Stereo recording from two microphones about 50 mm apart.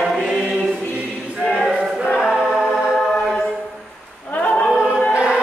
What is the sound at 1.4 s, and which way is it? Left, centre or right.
Choir, centre.